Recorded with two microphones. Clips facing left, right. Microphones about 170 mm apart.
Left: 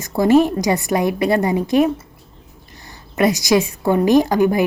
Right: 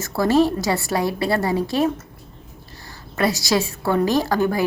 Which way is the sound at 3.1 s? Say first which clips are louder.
Left 5 dB; 20° left (ahead or behind).